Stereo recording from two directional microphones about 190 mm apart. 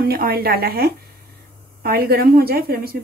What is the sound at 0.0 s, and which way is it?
A woman's voice, 50° right (ahead or behind).